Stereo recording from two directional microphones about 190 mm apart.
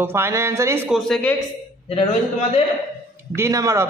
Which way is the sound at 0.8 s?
Centre (ahead or behind).